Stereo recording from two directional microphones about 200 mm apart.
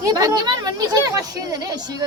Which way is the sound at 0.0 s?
20° right (ahead or behind).